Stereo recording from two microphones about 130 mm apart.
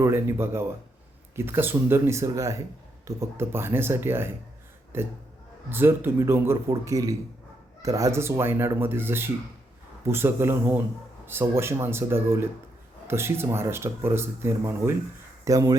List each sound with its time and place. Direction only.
0.0 s speech: 20° right (ahead or behind)